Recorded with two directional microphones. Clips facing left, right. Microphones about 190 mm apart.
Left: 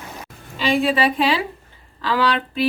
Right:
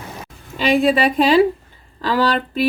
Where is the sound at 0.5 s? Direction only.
40° right (ahead or behind).